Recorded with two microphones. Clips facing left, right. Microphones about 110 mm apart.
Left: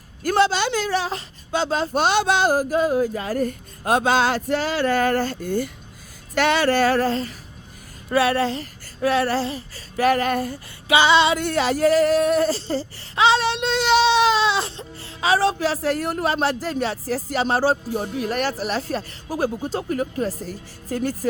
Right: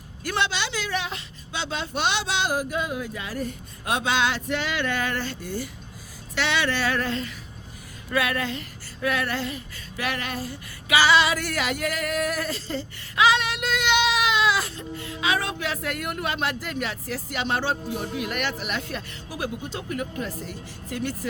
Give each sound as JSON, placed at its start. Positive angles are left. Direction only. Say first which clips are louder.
{"t": 0.2, "sound": "female singing", "louder": "left 8 dB", "side_deg": 40}
{"t": 8.1, "sound": "a sound", "louder": "left 6 dB", "side_deg": 30}
{"t": 10.3, "sound": "female singing", "louder": "left 8 dB", "side_deg": 55}
{"t": 10.8, "sound": "female singing", "louder": "left 3 dB", "side_deg": 25}